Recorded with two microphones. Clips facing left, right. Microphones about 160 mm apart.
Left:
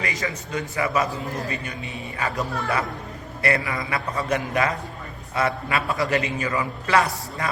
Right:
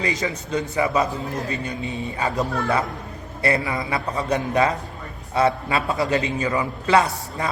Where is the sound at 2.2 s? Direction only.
20° right (ahead or behind).